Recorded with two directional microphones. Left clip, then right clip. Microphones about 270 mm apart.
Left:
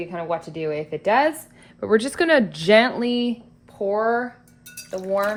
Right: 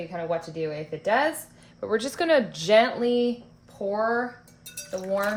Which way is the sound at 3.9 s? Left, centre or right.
Centre.